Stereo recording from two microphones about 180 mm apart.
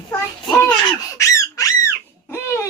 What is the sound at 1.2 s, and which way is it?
Squawk, 20° left (ahead or behind).